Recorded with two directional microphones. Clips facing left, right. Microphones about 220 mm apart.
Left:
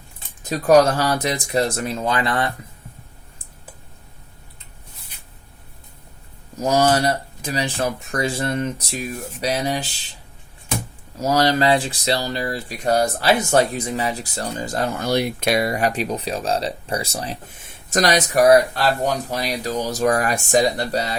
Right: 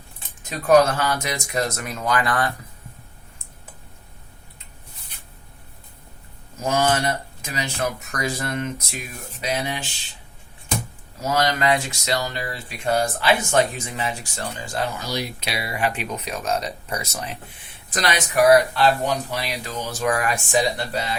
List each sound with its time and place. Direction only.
0.4 s speech: 35° left (ahead or behind)
6.6 s speech: 40° left (ahead or behind)
11.2 s speech: 35° left (ahead or behind)